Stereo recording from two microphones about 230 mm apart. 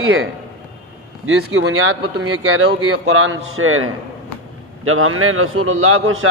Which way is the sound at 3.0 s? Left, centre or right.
Right.